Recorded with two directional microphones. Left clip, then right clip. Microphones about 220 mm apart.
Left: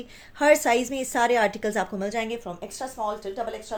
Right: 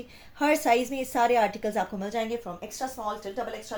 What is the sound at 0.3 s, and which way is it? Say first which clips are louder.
A woman's voice: left 4 dB; 40° left (ahead or behind).